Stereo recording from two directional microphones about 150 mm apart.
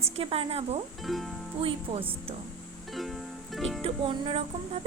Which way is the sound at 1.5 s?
40° right (ahead or behind).